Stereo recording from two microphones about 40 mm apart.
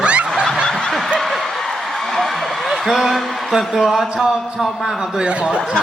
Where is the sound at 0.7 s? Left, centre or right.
Centre.